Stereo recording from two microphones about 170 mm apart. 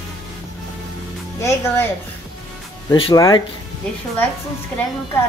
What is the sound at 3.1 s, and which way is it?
Speech, 20° left (ahead or behind).